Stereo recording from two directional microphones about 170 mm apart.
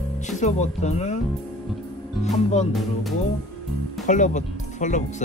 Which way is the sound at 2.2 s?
45° left (ahead or behind).